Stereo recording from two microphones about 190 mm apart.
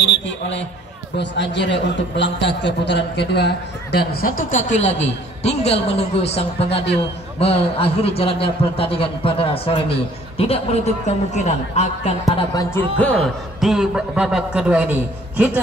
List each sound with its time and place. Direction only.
0.0 s a sound: 70° left (ahead or behind)
1.1 s a man's voice: 65° left (ahead or behind); by 12.1 s 35° left (ahead or behind)
12.3 s speech: 20° left (ahead or behind)
12.9 s a man's voice: 5° left (ahead or behind)